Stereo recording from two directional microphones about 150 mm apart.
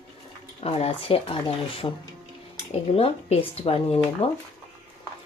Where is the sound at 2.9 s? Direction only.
40° left (ahead or behind).